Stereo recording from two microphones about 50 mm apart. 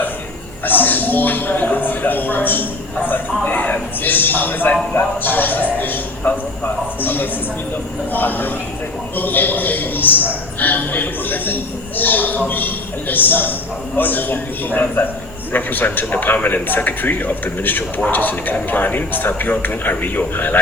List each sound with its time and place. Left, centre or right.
0.6 s a man's voice: left